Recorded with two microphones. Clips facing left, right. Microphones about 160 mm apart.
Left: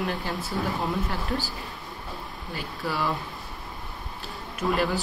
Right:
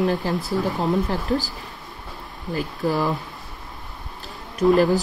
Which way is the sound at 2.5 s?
40° right (ahead or behind).